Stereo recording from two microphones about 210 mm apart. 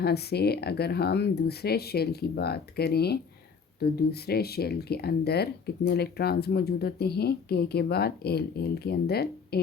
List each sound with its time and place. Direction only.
0.0 s speech: 50° left (ahead or behind)